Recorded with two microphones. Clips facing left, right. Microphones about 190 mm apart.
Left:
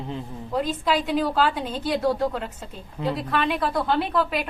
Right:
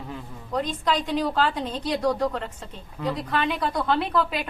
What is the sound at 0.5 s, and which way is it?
A woman's voice, 5° left (ahead or behind).